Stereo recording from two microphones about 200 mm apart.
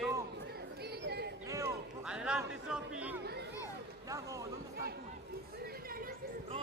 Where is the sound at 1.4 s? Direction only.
15° right (ahead or behind).